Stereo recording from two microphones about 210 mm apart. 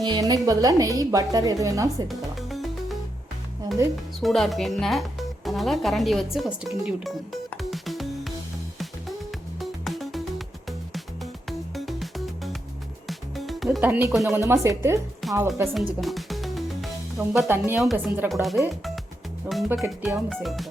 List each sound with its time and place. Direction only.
0.0 s a woman's voice: 20° right (ahead or behind)
2.0 s music: centre (ahead or behind)
4.2 s speech: centre (ahead or behind)
9.6 s music: centre (ahead or behind)
14.4 s a woman's voice: 15° right (ahead or behind)
15.2 s music: centre (ahead or behind)
15.6 s a woman's voice: 10° right (ahead or behind)
16.0 s music: centre (ahead or behind)
17.3 s speech: 5° right (ahead or behind)